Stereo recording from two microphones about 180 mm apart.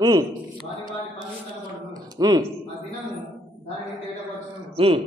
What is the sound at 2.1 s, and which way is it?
Speech, 20° right (ahead or behind).